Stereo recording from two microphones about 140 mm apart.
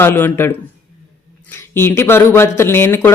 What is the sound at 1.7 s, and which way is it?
Speech, 15° left (ahead or behind).